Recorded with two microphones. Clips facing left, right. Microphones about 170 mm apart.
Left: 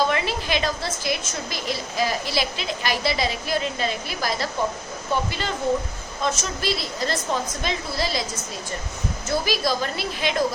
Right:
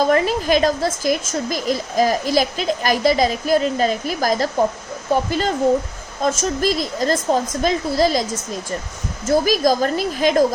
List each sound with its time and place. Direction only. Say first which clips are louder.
0.0 s a woman's voice: right 7 dB; 45° right (ahead or behind)
9.2 s a woman's voice: right 8 dB; 45° right (ahead or behind)